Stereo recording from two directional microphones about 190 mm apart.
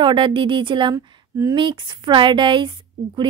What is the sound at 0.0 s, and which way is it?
A woman's voice, 25° right (ahead or behind).